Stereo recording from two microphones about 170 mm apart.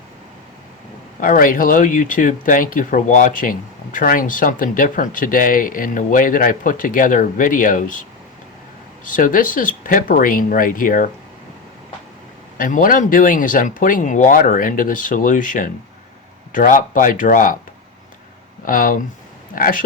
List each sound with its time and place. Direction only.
1.2 s speech: 55° left (ahead or behind)
9.0 s speech: 50° left (ahead or behind)
12.5 s speech: 50° left (ahead or behind)
18.6 s speech: 55° left (ahead or behind)